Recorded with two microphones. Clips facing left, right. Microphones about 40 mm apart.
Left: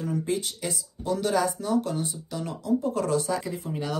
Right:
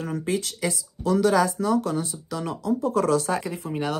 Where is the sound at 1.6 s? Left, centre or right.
Right.